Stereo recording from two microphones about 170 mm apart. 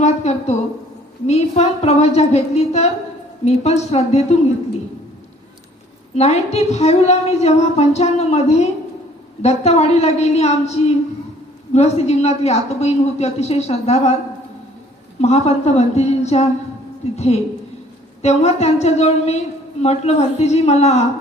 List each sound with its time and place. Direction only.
0.0 s a woman's voice: 40° left (ahead or behind)
6.1 s a woman's voice: 40° left (ahead or behind)
15.2 s a woman's voice: 40° left (ahead or behind)